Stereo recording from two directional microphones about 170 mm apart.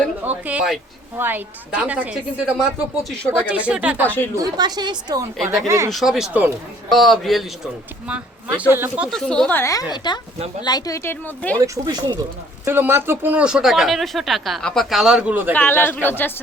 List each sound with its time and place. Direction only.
0.3 s a woman's voice: 10° right (ahead or behind)
4.4 s a woman's voice: 25° right (ahead or behind)
5.9 s a woman's voice: centre (ahead or behind)
9.0 s speech: 5° left (ahead or behind)
9.9 s a woman's voice: 25° left (ahead or behind)
11.5 s a woman's voice: 20° right (ahead or behind)
12.6 s speech: 15° right (ahead or behind)
15.5 s speech: 10° left (ahead or behind)